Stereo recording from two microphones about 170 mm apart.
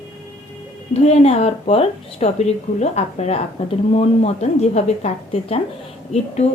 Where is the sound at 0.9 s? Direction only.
40° left (ahead or behind).